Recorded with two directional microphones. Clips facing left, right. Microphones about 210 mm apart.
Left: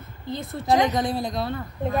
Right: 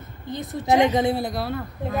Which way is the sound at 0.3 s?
20° right (ahead or behind).